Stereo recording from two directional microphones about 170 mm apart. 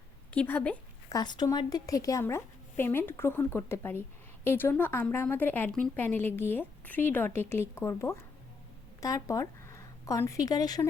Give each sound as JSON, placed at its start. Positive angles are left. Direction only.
{"t": 0.3, "sound": "a woman's voice", "side_deg": 10}
{"t": 1.1, "sound": "a woman's voice", "side_deg": 25}